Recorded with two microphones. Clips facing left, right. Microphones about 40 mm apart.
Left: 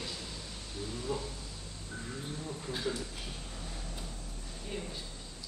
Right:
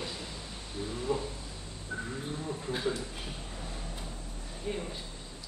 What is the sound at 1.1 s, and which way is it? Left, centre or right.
Speech, right.